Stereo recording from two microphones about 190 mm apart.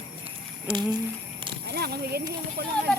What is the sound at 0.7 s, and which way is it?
Speech, 25° right (ahead or behind).